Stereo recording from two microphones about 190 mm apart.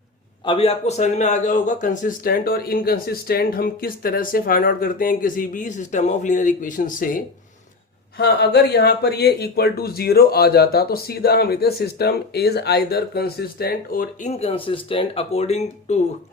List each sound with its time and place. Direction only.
0.4 s speech: 30° left (ahead or behind); by 7.2 s 45° left (ahead or behind)
8.2 s speech: 60° left (ahead or behind); by 16.0 s 35° left (ahead or behind)